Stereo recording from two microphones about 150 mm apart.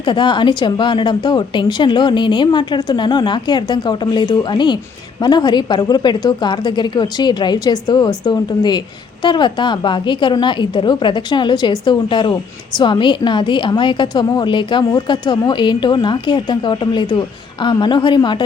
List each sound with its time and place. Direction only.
0.0 s a woman's voice: 30° left (ahead or behind)